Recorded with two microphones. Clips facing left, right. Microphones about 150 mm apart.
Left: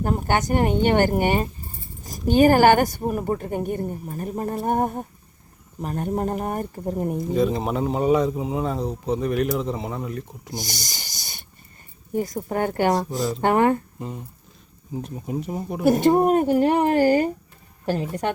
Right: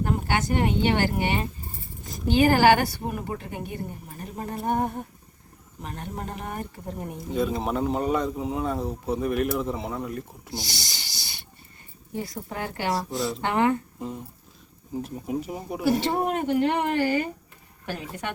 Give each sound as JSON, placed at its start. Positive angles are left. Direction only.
{"t": 0.0, "sound": "a woman's voice", "side_deg": 45}
{"t": 7.3, "sound": "speech", "side_deg": 0}
{"t": 10.5, "sound": "a sound", "side_deg": 45}
{"t": 12.1, "sound": "a woman's voice", "side_deg": 45}
{"t": 14.9, "sound": "speech", "side_deg": 0}
{"t": 15.8, "sound": "speech", "side_deg": 45}